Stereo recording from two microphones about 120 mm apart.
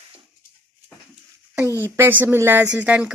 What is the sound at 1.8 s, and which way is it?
Speech, 15° right (ahead or behind).